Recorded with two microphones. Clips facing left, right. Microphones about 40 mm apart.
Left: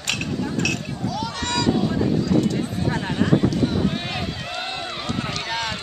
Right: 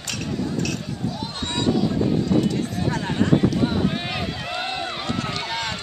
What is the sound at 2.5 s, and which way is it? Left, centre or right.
Clip-clop, centre.